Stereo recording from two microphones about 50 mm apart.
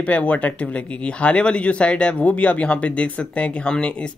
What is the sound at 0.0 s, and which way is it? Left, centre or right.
Speech, left.